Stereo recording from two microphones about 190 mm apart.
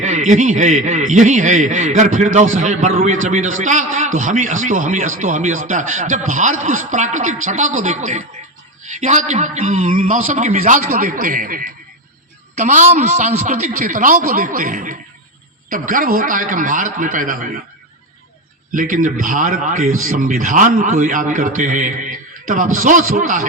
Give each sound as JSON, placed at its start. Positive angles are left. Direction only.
{"t": 0.0, "sound": "a man's voice", "side_deg": -40}
{"t": 18.7, "sound": "a man's voice", "side_deg": -45}